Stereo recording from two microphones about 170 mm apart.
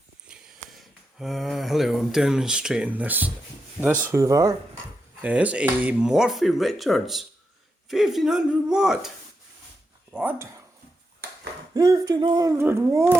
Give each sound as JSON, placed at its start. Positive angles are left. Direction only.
{"t": 0.3, "sound": "speech", "side_deg": 0}
{"t": 5.2, "sound": "speech", "side_deg": -10}
{"t": 11.7, "sound": "speech", "side_deg": -20}